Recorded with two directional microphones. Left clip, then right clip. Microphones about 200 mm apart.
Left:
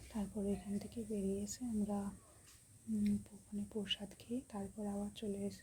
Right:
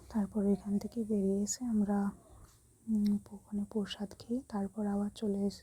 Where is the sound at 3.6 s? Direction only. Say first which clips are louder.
Right 2 dB; 30° right (ahead or behind).